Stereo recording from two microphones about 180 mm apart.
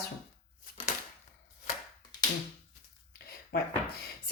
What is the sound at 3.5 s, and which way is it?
Speech, 55° left (ahead or behind).